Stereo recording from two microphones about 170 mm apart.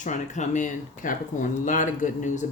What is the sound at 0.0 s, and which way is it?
Speech, 45° left (ahead or behind).